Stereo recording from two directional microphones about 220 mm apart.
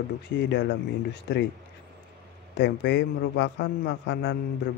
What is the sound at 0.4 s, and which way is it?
Speech, 55° left (ahead or behind).